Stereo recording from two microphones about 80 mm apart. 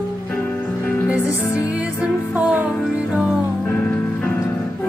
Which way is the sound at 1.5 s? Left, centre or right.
Centre.